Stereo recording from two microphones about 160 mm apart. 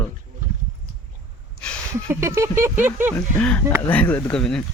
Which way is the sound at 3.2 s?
10° left (ahead or behind).